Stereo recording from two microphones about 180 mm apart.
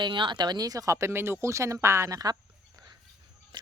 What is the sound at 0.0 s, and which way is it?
Speech, 25° right (ahead or behind).